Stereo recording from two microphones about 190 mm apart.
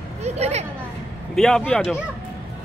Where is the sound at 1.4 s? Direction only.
5° left (ahead or behind).